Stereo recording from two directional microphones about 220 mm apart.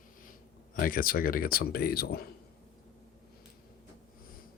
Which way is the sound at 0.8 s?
40° left (ahead or behind).